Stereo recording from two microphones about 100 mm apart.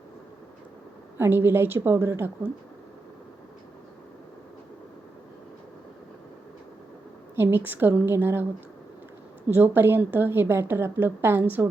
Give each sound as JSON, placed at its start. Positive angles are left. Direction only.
{"t": 1.2, "sound": "a woman's voice", "side_deg": -20}
{"t": 7.3, "sound": "a woman's voice", "side_deg": -20}
{"t": 9.5, "sound": "a woman's voice", "side_deg": -20}